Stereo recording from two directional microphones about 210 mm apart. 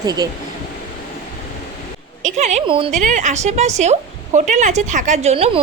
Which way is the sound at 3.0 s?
35° right (ahead or behind).